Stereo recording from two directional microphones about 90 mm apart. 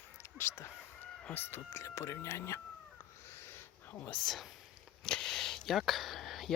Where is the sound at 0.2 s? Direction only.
30° left (ahead or behind).